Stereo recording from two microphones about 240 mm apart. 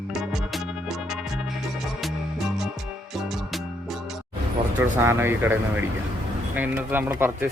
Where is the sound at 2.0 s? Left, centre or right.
Centre.